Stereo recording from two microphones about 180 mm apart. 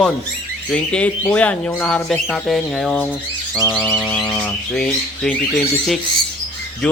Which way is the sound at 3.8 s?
10° left (ahead or behind).